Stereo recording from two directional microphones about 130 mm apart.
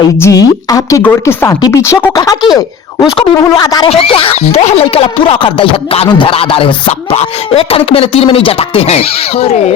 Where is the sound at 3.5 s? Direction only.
30° left (ahead or behind).